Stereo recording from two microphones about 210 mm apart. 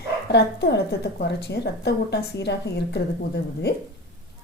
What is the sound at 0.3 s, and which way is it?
A woman's voice, 55° left (ahead or behind).